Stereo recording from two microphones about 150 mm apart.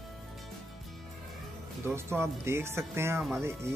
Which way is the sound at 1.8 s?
15° right (ahead or behind).